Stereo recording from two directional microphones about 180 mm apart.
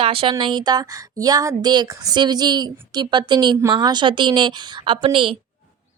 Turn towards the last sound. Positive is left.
turn(degrees=-30)  # may be behind; listen again after turning